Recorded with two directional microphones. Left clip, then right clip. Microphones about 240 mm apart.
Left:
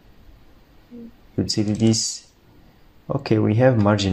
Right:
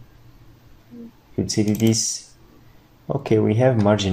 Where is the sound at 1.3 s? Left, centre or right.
Centre.